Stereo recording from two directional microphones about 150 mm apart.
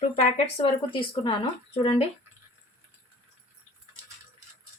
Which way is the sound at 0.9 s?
35° left (ahead or behind).